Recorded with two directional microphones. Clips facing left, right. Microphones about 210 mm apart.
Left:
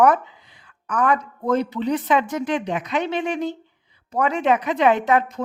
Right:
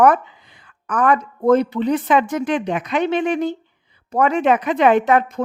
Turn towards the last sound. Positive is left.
turn(degrees=-55)  # may be behind; listen again after turning